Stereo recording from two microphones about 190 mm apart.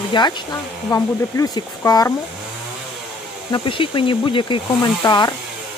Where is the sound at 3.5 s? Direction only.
25° left (ahead or behind).